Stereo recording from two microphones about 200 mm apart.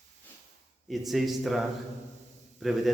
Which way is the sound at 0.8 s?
Centre (ahead or behind).